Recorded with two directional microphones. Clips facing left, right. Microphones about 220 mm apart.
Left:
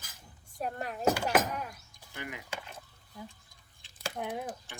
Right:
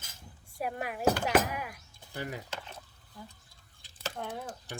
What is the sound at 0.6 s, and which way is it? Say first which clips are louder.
Speech: right 1 dB; 10° right (ahead or behind).